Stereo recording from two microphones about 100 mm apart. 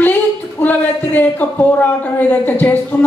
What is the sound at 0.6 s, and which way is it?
A woman's voice, 20° left (ahead or behind).